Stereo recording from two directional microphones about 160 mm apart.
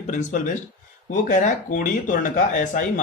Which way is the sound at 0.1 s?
50° left (ahead or behind).